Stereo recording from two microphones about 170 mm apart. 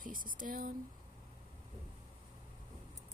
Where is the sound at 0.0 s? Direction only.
55° right (ahead or behind).